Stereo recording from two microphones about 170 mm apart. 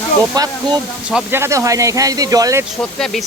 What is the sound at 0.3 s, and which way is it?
Speech, 20° right (ahead or behind).